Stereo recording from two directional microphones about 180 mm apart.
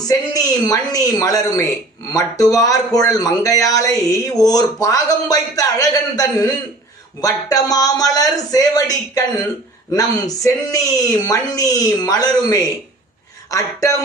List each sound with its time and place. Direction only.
0.0 s a man's voice: 20° left (ahead or behind)